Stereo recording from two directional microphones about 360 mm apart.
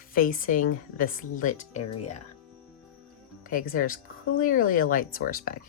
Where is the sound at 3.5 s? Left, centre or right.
Left.